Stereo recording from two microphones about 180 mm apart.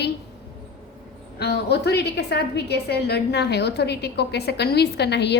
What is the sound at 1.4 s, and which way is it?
A woman's voice, 65° left (ahead or behind).